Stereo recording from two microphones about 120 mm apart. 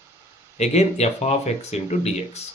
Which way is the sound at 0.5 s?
65° left (ahead or behind).